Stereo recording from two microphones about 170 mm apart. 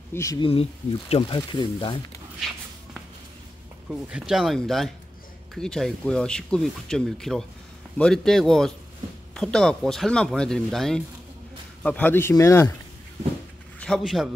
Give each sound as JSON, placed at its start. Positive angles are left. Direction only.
{"t": 0.1, "sound": "speech", "side_deg": 20}
{"t": 0.4, "sound": "speech", "side_deg": 35}
{"t": 3.9, "sound": "speech", "side_deg": -5}
{"t": 13.7, "sound": "a man's voice", "side_deg": 5}